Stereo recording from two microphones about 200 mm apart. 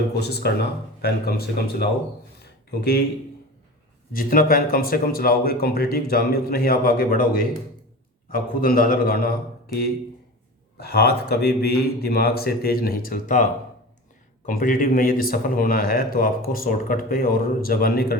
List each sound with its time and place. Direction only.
0.3 s speech: 55° left (ahead or behind)
2.4 s a sound: 50° left (ahead or behind)
4.1 s speech: 45° left (ahead or behind)
10.8 s speech: 50° left (ahead or behind)